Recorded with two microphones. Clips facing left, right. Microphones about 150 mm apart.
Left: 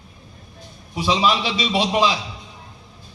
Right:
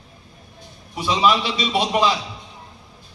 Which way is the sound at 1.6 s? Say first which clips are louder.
Left 1 dB; 50° right (ahead or behind).